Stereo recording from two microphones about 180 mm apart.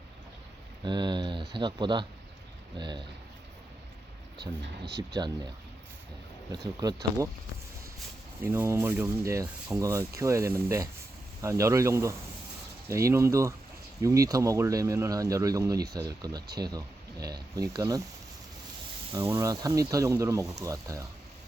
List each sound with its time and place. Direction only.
0.9 s speech: 25° right (ahead or behind)
5.1 s speech: 25° right (ahead or behind)
6.7 s speech: 20° right (ahead or behind)
8.4 s speech: 15° right (ahead or behind)
19.1 s speech: 15° right (ahead or behind)